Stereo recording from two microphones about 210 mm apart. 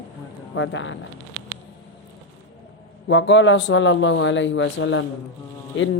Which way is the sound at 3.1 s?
60° left (ahead or behind).